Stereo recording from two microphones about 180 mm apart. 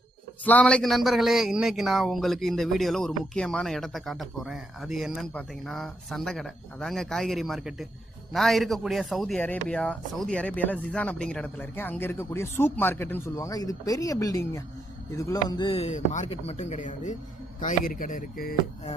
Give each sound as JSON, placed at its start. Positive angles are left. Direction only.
{"t": 0.4, "sound": "a man's voice", "side_deg": 5}